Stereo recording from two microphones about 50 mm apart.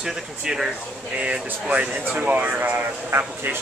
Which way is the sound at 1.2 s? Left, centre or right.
Right.